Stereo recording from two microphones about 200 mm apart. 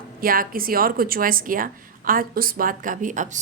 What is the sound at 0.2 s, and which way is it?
A woman's voice, 45° right (ahead or behind).